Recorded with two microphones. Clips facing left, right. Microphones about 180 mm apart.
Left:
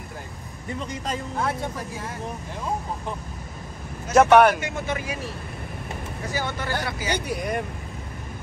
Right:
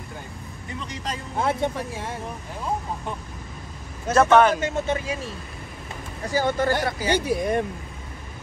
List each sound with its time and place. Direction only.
1.4 s speech: 25° right (ahead or behind)
4.1 s speech: 15° left (ahead or behind)
4.8 s speech: 30° right (ahead or behind)
6.3 s speech: 45° right (ahead or behind)
7.1 s speech: 25° right (ahead or behind)